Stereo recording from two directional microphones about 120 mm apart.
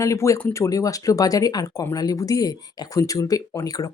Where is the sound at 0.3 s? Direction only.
15° left (ahead or behind).